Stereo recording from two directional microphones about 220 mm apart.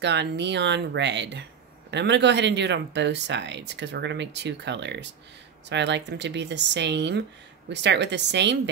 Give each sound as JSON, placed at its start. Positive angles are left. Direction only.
{"t": 0.0, "sound": "speech", "side_deg": -50}